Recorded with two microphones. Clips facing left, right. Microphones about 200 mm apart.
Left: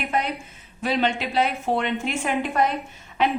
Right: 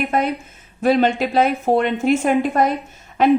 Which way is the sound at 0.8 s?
45° right (ahead or behind).